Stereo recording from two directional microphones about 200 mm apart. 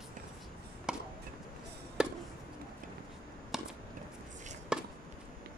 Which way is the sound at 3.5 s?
Centre (ahead or behind).